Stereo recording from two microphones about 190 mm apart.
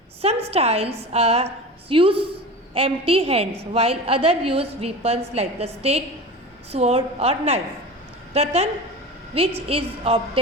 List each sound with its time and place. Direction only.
0.2 s a woman's voice: 30° right (ahead or behind)